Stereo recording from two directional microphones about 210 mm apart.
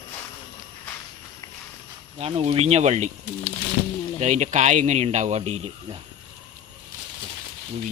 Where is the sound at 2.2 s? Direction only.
30° right (ahead or behind).